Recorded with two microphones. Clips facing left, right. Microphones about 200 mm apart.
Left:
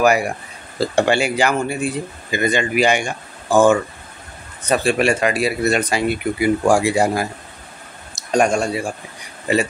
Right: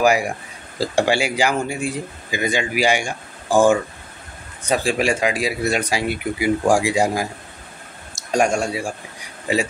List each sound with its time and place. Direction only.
0.0 s speech: 10° right (ahead or behind)
8.3 s speech: 10° right (ahead or behind)